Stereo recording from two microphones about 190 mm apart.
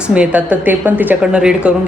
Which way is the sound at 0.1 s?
5° right (ahead or behind).